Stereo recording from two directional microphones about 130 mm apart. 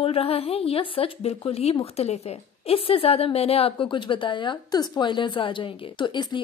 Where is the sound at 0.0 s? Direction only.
45° left (ahead or behind).